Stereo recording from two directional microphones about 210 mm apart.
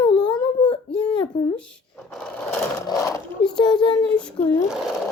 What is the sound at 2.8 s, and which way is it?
Sewing machine, 15° left (ahead or behind).